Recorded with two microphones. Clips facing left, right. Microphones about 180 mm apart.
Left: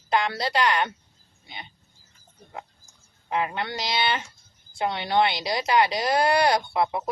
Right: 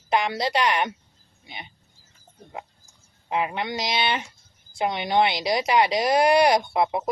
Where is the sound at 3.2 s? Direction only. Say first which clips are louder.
Right 1 dB; 20° right (ahead or behind).